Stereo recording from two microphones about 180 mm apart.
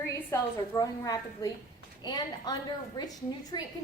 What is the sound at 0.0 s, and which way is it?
A woman's voice, 15° left (ahead or behind).